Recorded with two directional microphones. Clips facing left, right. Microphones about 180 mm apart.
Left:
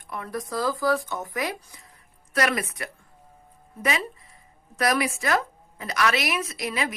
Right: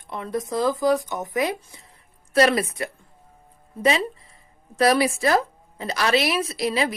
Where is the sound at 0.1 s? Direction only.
25° right (ahead or behind).